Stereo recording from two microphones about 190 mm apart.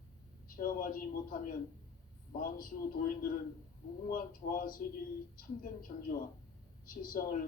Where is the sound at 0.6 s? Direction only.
50° left (ahead or behind).